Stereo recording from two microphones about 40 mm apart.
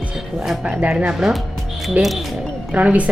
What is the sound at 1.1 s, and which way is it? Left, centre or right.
Speech, centre.